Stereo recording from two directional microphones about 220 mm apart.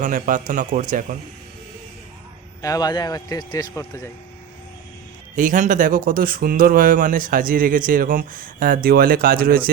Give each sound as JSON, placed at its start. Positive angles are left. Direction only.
{"t": 0.0, "sound": "speech", "side_deg": -40}
{"t": 2.6, "sound": "a man's voice", "side_deg": 15}
{"t": 5.3, "sound": "speech", "side_deg": -35}